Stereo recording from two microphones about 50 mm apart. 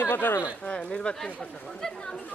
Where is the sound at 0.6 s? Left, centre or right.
Left.